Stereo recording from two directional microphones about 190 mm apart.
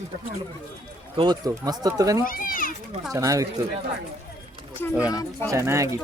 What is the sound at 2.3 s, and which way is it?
Children playing, 45° left (ahead or behind).